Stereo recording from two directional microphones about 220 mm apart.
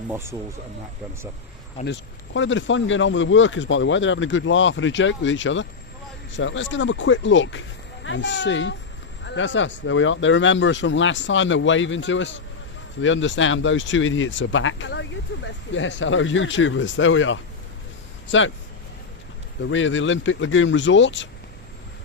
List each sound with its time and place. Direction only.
0.1 s speech: 10° right (ahead or behind)
1.8 s speech: 55° left (ahead or behind)
19.7 s speech: 60° left (ahead or behind)